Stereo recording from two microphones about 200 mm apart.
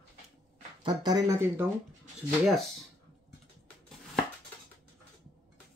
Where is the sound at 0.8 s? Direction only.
20° right (ahead or behind).